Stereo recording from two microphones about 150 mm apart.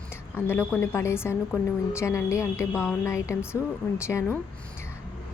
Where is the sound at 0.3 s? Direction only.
15° left (ahead or behind).